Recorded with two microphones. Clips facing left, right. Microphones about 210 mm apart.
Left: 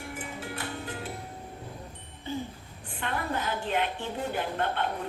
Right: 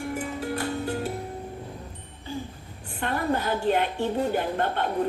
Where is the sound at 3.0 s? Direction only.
45° right (ahead or behind).